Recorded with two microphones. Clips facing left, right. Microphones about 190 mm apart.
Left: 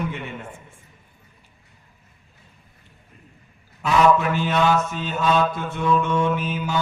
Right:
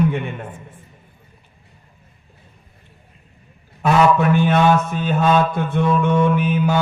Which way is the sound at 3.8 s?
60° right (ahead or behind).